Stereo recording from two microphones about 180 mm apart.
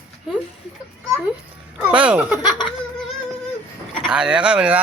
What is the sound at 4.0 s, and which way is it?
Speech, 5° right (ahead or behind).